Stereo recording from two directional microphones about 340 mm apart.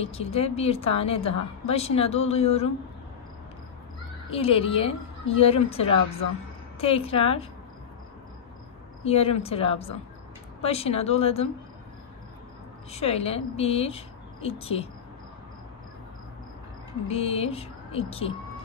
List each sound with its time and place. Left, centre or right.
0.0 s a woman's voice: centre
4.3 s a woman's voice: centre
9.0 s a woman's voice: centre
12.9 s a woman's voice: centre
17.1 s a woman's voice: centre